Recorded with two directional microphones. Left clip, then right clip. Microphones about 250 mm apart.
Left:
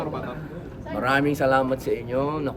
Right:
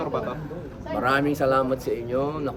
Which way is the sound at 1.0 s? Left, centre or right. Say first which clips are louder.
Left 1 dB; centre.